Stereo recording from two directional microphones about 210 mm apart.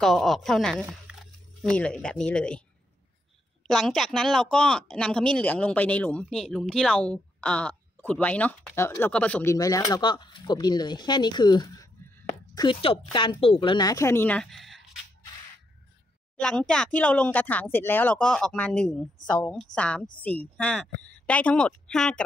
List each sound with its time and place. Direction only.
0.0 s speech: centre (ahead or behind)
3.6 s speech: centre (ahead or behind)
16.3 s speech: 5° left (ahead or behind)